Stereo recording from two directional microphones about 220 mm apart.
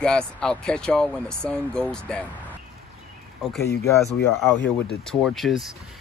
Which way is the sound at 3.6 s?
45° left (ahead or behind).